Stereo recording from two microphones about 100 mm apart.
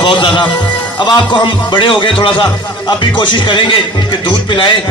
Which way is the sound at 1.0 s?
50° left (ahead or behind).